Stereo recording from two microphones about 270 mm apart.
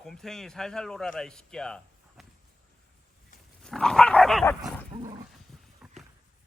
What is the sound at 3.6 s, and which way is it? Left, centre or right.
Dog, centre.